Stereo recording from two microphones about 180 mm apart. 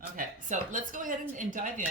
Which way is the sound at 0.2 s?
45° right (ahead or behind).